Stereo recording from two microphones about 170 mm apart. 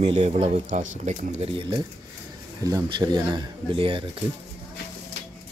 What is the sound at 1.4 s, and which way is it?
Speech, 35° right (ahead or behind).